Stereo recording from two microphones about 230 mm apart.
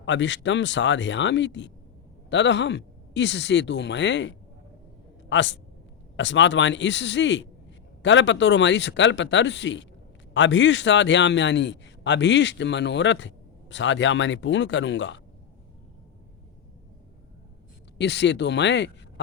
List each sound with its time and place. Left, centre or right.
0.0 s a man's voice: left
17.9 s speech: left